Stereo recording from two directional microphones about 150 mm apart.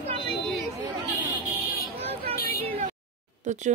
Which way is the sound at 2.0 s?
40° right (ahead or behind).